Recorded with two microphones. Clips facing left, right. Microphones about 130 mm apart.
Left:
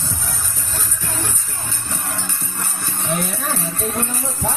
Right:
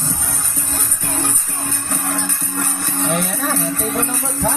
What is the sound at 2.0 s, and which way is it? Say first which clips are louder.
Music: right 5 dB; 60° right (ahead or behind).